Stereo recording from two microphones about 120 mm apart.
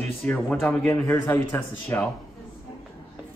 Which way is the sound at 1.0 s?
15° left (ahead or behind).